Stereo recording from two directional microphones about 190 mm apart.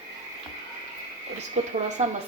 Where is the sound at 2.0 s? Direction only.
35° right (ahead or behind).